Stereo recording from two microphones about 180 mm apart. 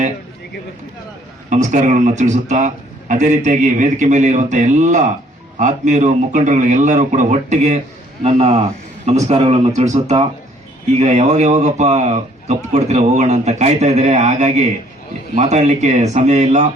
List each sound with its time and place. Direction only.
1.5 s a man's voice: 45° right (ahead or behind)